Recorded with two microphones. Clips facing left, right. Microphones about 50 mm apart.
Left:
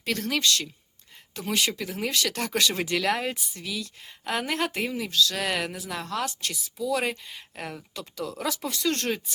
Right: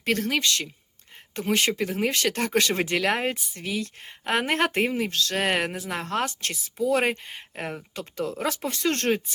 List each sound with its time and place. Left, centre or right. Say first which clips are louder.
0.0 s speech: right 2 dB; right
1.4 s speech: right 4 dB; right